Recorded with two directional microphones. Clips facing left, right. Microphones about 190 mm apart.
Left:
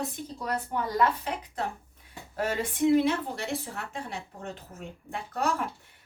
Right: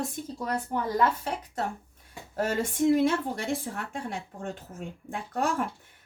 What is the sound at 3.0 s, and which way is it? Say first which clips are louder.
A woman's voice: right 1 dB; 50° right (ahead or behind).